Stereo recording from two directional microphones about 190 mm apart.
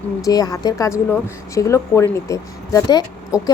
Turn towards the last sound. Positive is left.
turn(degrees=15)  # may be behind; listen again after turning